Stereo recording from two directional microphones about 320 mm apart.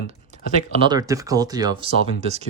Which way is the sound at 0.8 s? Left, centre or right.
Centre.